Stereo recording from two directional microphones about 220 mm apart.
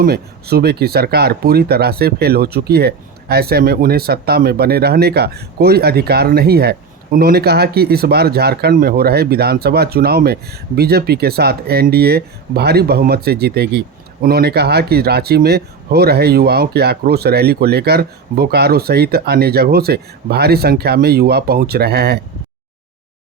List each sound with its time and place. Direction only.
0.0 s speech: 45° right (ahead or behind)